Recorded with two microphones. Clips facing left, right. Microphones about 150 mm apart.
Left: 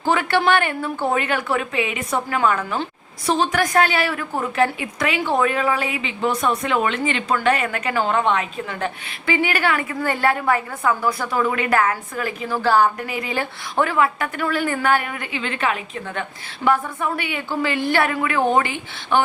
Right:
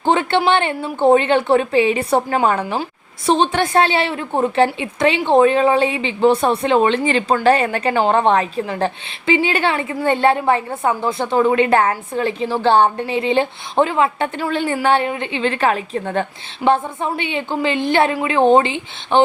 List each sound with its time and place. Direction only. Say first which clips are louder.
0.0 s a woman's voice: right 3 dB; 25° right (ahead or behind)
16.6 s a woman's voice: right 3 dB; 25° right (ahead or behind)